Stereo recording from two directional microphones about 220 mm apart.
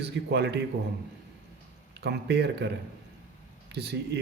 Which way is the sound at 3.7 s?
50° right (ahead or behind).